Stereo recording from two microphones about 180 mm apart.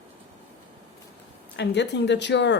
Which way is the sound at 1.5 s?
75° left (ahead or behind).